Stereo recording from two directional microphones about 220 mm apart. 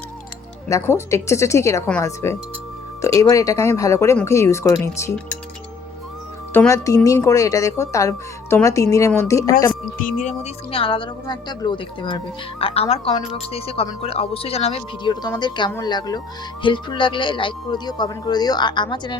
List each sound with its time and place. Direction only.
0.7 s speech: 10° left (ahead or behind)
6.5 s speech: 10° left (ahead or behind)
10.0 s speech: 35° left (ahead or behind); by 19.2 s 20° left (ahead or behind)